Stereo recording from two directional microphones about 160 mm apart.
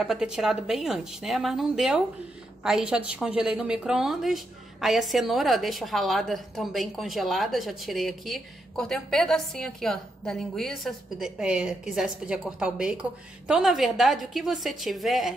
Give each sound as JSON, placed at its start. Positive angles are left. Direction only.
{"t": 0.0, "sound": "a woman's voice", "side_deg": -5}